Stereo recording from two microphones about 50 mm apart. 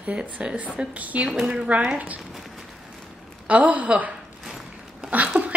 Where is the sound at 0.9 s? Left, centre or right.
Right.